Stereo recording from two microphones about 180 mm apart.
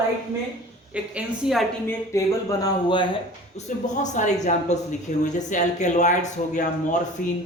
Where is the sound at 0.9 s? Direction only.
5° right (ahead or behind).